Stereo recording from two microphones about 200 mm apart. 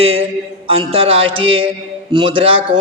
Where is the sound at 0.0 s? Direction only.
30° right (ahead or behind).